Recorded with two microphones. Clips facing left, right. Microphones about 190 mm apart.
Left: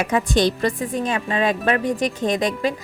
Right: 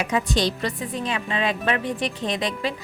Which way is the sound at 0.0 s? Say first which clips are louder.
Left 4 dB; 50° left (ahead or behind).